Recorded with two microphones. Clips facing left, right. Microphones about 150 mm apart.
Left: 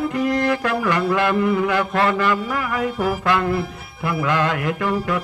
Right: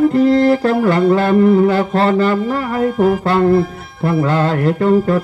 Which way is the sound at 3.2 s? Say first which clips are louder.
Right 7 dB; 30° right (ahead or behind).